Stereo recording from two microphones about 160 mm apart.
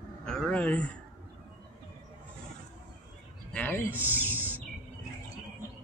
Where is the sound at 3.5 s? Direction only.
15° left (ahead or behind).